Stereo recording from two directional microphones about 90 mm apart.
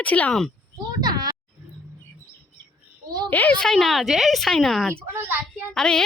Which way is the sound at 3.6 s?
5° left (ahead or behind).